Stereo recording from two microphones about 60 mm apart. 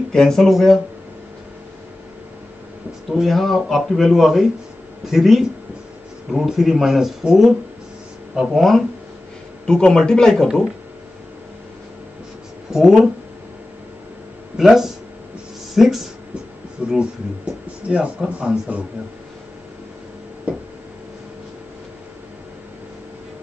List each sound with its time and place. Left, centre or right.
0.1 s speech: centre
3.1 s speech: centre
9.7 s a man's voice: centre
12.7 s speech: centre
14.6 s speech: centre
16.8 s speech: centre